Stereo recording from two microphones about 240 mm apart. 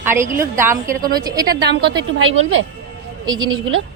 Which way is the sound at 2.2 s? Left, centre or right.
Right.